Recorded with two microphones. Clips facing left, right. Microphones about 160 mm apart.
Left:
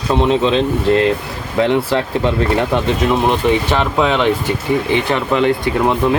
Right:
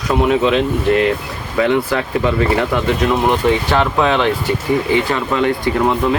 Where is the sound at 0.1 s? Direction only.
25° left (ahead or behind).